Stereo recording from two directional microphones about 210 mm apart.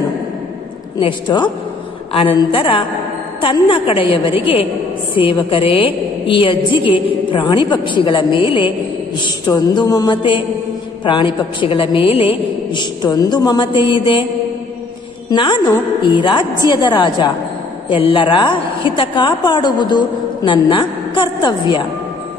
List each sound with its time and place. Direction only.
0.9 s a woman's voice: 20° left (ahead or behind)
15.2 s a woman's voice: 20° left (ahead or behind)